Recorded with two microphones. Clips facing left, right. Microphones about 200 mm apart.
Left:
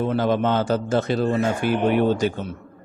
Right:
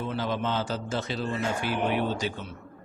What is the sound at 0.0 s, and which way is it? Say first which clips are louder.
A man's voice: left 9 dB; 55° left (ahead or behind).